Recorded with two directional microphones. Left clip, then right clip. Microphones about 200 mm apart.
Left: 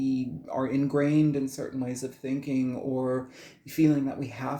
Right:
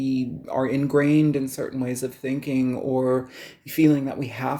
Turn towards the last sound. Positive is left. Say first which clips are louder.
# right 6 dB
turn(degrees=-35)  # may be behind; listen again after turning